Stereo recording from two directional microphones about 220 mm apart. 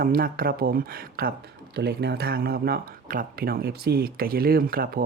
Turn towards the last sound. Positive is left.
turn(degrees=-40)  # may be behind; listen again after turning